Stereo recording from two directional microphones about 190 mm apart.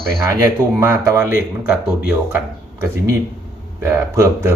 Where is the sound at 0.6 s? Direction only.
15° right (ahead or behind).